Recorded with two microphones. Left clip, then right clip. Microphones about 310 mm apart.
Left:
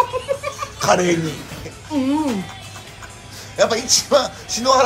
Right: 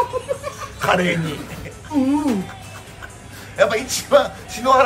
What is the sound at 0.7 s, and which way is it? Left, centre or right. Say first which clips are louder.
Speech: left 1 dB; centre.